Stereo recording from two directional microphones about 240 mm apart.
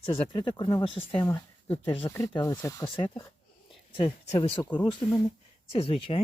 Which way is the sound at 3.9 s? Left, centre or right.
Left.